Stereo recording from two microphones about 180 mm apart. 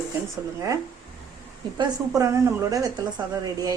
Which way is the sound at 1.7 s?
20° right (ahead or behind).